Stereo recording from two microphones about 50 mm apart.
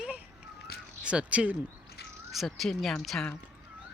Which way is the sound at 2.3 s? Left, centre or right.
Centre.